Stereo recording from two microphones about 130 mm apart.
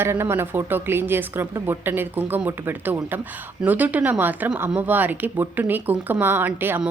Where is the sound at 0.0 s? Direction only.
20° right (ahead or behind).